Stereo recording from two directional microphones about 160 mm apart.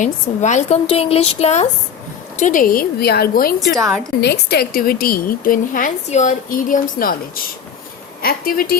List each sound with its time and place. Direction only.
0.0 s a woman's voice: 50° left (ahead or behind); by 3.5 s 75° left (ahead or behind)
3.8 s a woman's voice: 20° right (ahead or behind)
4.2 s a woman's voice: 90° left; by 8.7 s 65° left (ahead or behind)